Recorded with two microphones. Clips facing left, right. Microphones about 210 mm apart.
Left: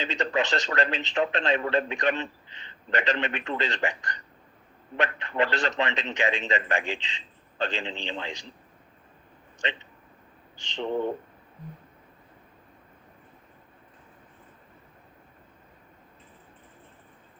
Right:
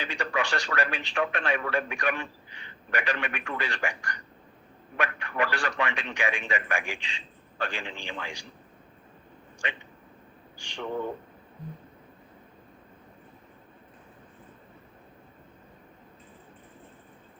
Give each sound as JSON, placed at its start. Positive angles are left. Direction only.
{"t": 0.0, "sound": "a man's voice", "side_deg": 20}
{"t": 10.6, "sound": "speech", "side_deg": 20}